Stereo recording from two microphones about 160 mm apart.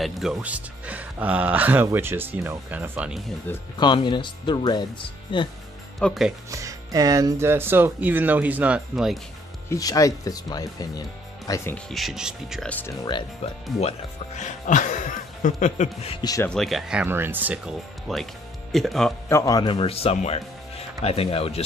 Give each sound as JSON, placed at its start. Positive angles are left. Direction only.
{"t": 0.0, "sound": "speech", "side_deg": -5}
{"t": 3.7, "sound": "speech", "side_deg": 30}
{"t": 5.9, "sound": "speech", "side_deg": 0}
{"t": 6.5, "sound": "speech", "side_deg": -20}
{"t": 9.7, "sound": "speech", "side_deg": 20}
{"t": 11.7, "sound": "speech", "side_deg": 0}
{"t": 12.6, "sound": "speech", "side_deg": 10}
{"t": 12.9, "sound": "speech", "side_deg": 25}
{"t": 13.7, "sound": "speech", "side_deg": 45}
{"t": 16.2, "sound": "speech", "side_deg": 25}
{"t": 16.4, "sound": "speech", "side_deg": 0}
{"t": 19.2, "sound": "speech", "side_deg": 20}